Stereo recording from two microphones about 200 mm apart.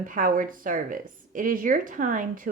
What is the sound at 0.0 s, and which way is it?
Speech, 45° right (ahead or behind).